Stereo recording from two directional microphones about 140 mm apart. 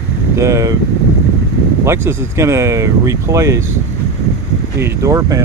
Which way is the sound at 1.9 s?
20° right (ahead or behind).